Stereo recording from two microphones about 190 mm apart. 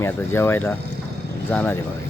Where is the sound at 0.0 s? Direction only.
10° left (ahead or behind).